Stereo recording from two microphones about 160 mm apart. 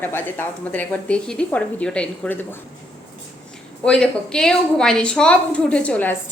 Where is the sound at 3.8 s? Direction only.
5° left (ahead or behind).